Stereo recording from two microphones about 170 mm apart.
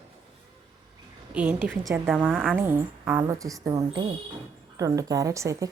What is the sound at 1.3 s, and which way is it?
A woman's voice, 10° right (ahead or behind).